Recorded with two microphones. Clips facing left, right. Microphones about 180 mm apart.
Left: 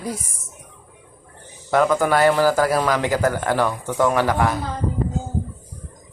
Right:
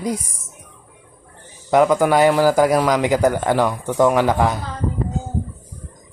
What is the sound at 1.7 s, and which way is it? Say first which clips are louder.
A man's voice: right 3 dB; 15° right (ahead or behind).